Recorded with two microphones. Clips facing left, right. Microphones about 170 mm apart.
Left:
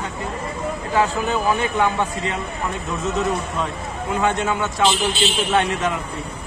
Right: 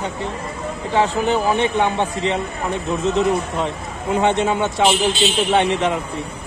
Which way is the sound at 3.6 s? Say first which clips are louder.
Right 2 dB; 25° right (ahead or behind).